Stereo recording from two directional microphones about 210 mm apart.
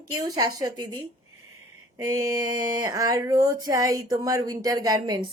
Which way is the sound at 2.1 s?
15° right (ahead or behind).